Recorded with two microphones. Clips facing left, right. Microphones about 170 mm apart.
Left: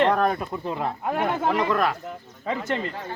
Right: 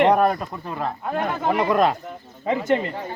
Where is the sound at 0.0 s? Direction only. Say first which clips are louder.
Right 4 dB; 15° right (ahead or behind).